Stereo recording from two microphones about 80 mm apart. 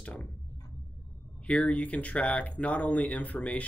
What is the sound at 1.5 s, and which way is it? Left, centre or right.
Speech, centre.